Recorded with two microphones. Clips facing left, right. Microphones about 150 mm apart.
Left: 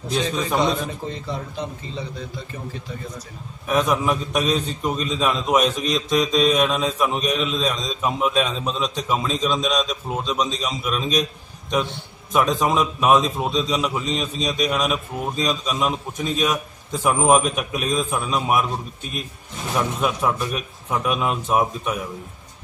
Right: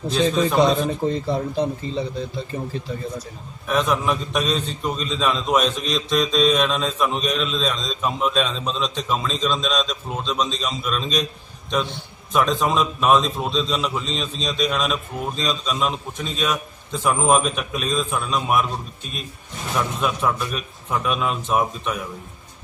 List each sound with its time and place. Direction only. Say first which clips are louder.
1.0 s speech: right 7 dB; 35° right (ahead or behind)
3.6 s a man's voice: left 1 dB; 10° left (ahead or behind)
19.7 s a man's voice: left 1 dB; 10° left (ahead or behind)